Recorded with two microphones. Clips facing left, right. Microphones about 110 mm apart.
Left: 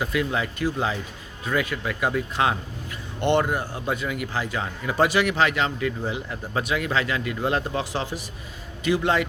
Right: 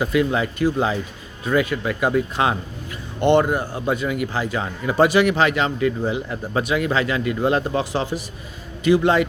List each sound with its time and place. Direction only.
0.0 s a man's voice: 20° right (ahead or behind)